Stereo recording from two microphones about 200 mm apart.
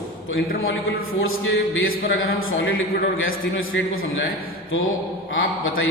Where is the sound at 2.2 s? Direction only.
85° left.